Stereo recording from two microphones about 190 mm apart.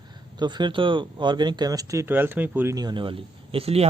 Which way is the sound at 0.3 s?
25° right (ahead or behind).